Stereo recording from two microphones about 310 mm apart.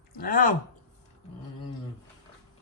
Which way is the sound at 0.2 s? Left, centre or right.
Left.